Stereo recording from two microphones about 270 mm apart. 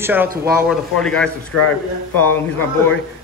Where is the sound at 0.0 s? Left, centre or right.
Centre.